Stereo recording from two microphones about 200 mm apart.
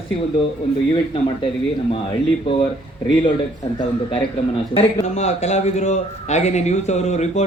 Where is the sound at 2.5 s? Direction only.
25° left (ahead or behind).